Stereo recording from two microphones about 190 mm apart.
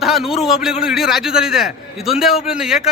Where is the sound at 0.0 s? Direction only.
Centre (ahead or behind).